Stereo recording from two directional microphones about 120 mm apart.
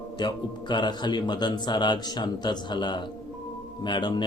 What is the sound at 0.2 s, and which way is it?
A man's voice, 40° left (ahead or behind).